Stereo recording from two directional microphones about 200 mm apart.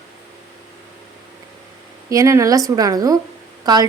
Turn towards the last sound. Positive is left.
turn(degrees=-20)  # may be behind; listen again after turning